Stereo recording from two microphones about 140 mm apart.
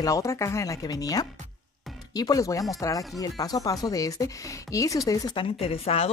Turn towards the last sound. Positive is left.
turn(degrees=45)  # may be behind; listen again after turning